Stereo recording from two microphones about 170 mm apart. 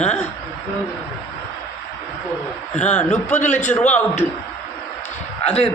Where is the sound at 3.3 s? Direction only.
45° left (ahead or behind).